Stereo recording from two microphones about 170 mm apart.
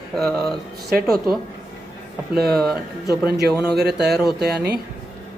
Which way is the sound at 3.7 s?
75° right (ahead or behind).